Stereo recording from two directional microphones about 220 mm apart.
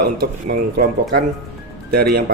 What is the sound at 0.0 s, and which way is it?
Speech, 40° right (ahead or behind).